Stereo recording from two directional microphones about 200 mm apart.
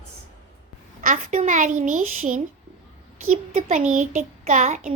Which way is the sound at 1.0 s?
40° right (ahead or behind).